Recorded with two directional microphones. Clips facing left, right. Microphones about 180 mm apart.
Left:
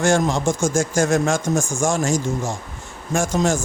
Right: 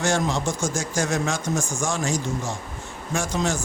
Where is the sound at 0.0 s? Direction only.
50° left (ahead or behind).